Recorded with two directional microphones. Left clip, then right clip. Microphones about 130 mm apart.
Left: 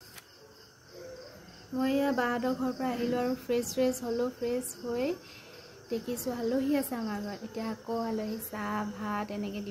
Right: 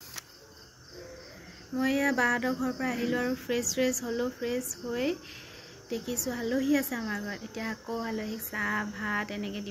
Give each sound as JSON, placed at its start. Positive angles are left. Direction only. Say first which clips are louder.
{"t": 1.8, "sound": "a woman's voice", "louder": "right 2 dB", "side_deg": 15}